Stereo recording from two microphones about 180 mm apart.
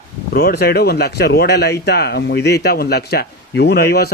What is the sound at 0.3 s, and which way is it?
Speech, 65° left (ahead or behind).